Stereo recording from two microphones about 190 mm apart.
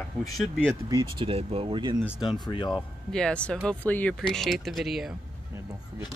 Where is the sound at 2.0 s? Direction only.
Centre (ahead or behind).